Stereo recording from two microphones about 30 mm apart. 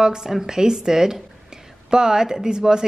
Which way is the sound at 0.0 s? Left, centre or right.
Right.